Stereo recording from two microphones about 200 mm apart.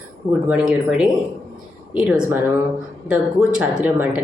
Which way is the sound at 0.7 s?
5° right (ahead or behind).